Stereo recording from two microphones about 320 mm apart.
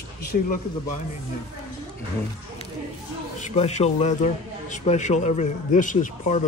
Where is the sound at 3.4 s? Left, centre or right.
Left.